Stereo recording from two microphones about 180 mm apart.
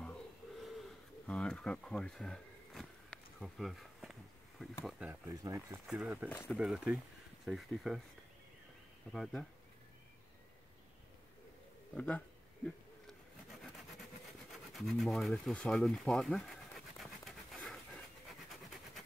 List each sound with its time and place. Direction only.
0.0 s pigeon: centre (ahead or behind)
4.8 s speech: 5° right (ahead or behind)
5.3 s speech: 20° right (ahead or behind)
5.9 s speech: 5° right (ahead or behind)
6.2 s speech: 15° left (ahead or behind)
6.5 s speech: 5° right (ahead or behind)
9.1 s speech: 5° left (ahead or behind)
11.9 s speech: 5° left (ahead or behind)
12.6 s a sound: centre (ahead or behind)
14.5 s speech: centre (ahead or behind)
16.1 s a sound: 5° left (ahead or behind)